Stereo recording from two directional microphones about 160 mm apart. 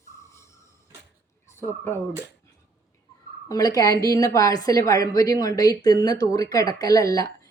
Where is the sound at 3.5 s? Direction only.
25° left (ahead or behind).